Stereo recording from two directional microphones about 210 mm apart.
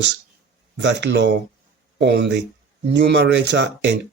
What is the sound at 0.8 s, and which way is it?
Speech, 60° right (ahead or behind).